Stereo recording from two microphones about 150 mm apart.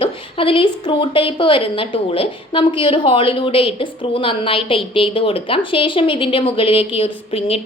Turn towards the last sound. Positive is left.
turn(degrees=40)  # may be behind; listen again after turning